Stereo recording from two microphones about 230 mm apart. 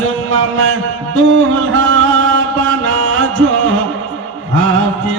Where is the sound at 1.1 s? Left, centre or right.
Right.